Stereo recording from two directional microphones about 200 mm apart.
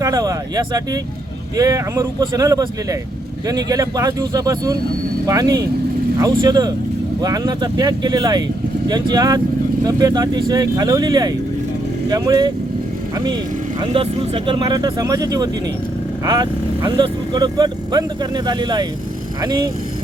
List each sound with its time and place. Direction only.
0.0 s speech: 20° right (ahead or behind)
13.7 s speech: 25° right (ahead or behind)